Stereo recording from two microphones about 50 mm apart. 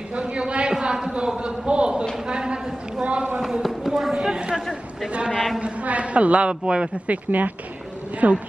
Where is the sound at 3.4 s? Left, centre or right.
Centre.